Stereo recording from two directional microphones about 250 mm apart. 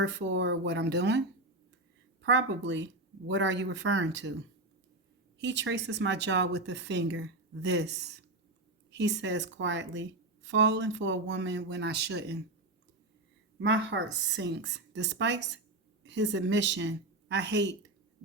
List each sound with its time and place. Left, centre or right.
0.0 s speech: right
2.2 s speech: right
13.6 s speech: right